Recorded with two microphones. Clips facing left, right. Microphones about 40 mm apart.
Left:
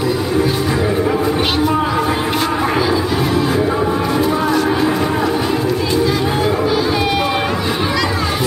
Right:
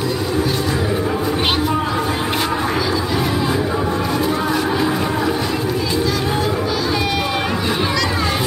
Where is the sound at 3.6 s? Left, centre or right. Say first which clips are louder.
Left 3 dB; centre.